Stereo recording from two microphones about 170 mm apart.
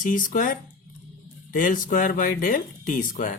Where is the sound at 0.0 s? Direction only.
50° left (ahead or behind).